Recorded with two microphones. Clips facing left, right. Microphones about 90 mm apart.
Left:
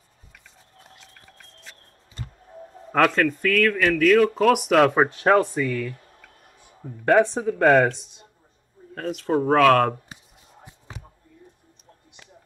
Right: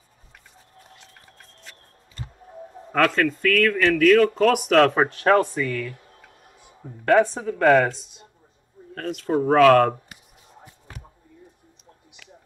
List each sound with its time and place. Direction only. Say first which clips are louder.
3.2 s speech: even; 5° left (ahead or behind)
7.1 s speech: even; 20° left (ahead or behind)
8.9 s speech: even; centre (ahead or behind)